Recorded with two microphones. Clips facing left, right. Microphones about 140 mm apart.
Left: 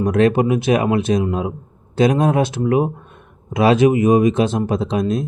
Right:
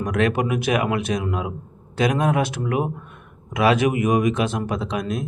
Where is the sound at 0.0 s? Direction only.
30° left (ahead or behind).